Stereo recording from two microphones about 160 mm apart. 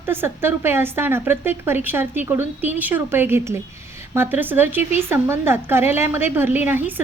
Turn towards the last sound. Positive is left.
turn(degrees=-10)  # may be behind; listen again after turning